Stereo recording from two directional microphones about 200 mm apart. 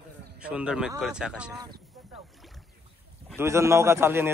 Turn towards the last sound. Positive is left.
turn(degrees=-15)  # may be behind; listen again after turning